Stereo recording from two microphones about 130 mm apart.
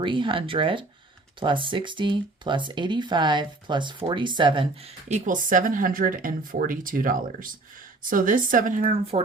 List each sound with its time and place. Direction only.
0.0 s speech: 40° right (ahead or behind)
5.0 s speech: 75° right (ahead or behind)